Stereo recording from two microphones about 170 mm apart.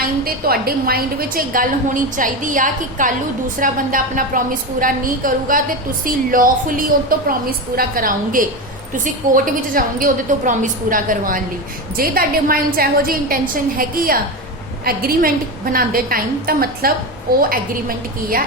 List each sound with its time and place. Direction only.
0.0 s a woman's voice: 60° right (ahead or behind)